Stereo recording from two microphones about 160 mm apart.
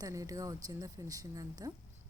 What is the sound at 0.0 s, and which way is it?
Speech, 20° right (ahead or behind).